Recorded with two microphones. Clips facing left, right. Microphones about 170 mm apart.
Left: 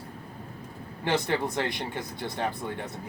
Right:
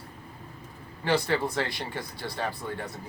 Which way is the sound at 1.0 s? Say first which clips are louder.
Right 1 dB; 20° left (ahead or behind).